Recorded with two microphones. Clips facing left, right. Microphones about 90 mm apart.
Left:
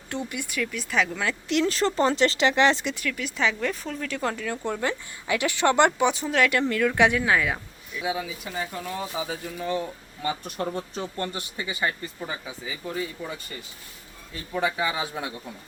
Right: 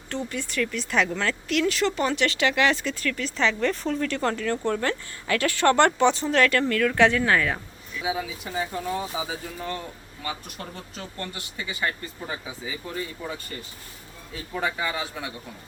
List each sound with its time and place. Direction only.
0.1 s speech: 15° left (ahead or behind)
1.5 s speech: 30° left (ahead or behind); by 8.0 s 10° left (ahead or behind)
8.0 s speech: centre (ahead or behind)
9.6 s speech: 10° left (ahead or behind)
10.2 s speech: 30° left (ahead or behind)
11.8 s speech: 15° left (ahead or behind)
12.3 s speech: centre (ahead or behind)
14.5 s speech: 5° left (ahead or behind)